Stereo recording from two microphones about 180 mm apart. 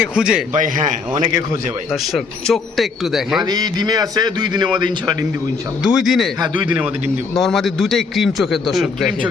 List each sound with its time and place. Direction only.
0.1 s a man's voice: 5° right (ahead or behind)
0.5 s a man's voice: 45° right (ahead or behind)
1.9 s a man's voice: centre (ahead or behind)
3.4 s a man's voice: 20° right (ahead or behind)
5.8 s a man's voice: centre (ahead or behind)